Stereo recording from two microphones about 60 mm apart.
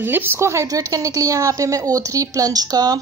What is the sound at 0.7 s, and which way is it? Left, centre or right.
A woman's voice, right.